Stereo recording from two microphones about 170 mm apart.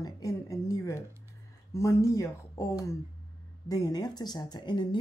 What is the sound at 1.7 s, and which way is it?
Speech, 20° left (ahead or behind).